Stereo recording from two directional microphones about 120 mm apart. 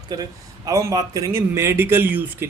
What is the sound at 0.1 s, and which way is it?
Speech, 30° right (ahead or behind).